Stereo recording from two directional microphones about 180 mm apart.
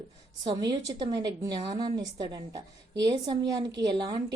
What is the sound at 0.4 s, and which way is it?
A woman's voice, 25° right (ahead or behind).